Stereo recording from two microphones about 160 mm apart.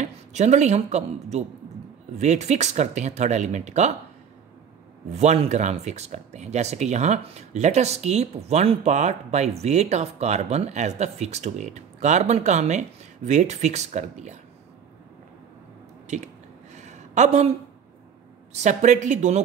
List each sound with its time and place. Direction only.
0.0 s a woman's voice: 45° right (ahead or behind)
5.1 s speech: 45° right (ahead or behind)
16.1 s speech: 45° right (ahead or behind)
16.7 s a sound: 45° right (ahead or behind)
18.5 s speech: 45° right (ahead or behind)